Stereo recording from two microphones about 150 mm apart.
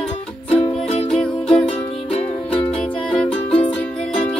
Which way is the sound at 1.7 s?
40° left (ahead or behind).